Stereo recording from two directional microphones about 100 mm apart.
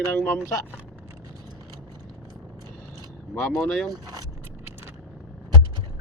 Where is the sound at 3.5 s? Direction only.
5° left (ahead or behind).